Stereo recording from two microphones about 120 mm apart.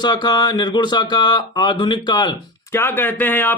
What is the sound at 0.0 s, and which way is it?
Speech, 40° left (ahead or behind).